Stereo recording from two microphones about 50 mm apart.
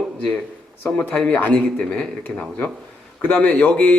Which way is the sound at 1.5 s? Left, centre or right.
Centre.